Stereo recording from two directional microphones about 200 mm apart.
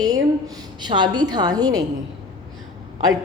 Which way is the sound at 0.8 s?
20° right (ahead or behind).